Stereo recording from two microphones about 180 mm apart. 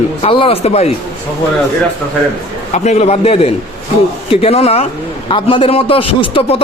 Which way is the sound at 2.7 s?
40° left (ahead or behind).